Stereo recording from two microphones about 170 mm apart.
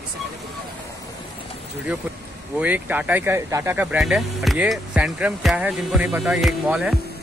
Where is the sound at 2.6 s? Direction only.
10° right (ahead or behind).